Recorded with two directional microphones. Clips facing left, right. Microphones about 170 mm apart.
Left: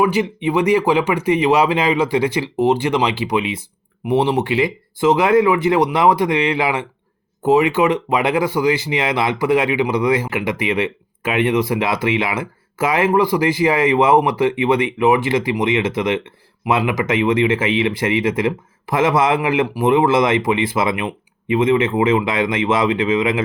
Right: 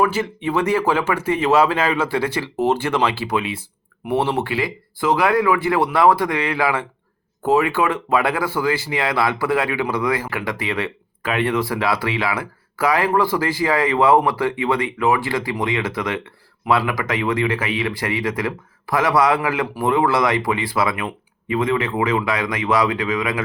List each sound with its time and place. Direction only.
0.0 s speech: 15° left (ahead or behind)